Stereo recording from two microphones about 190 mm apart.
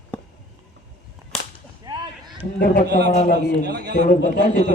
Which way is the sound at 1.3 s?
5° left (ahead or behind).